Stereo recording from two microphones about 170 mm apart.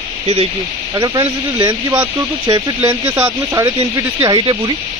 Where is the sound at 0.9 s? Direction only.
15° right (ahead or behind).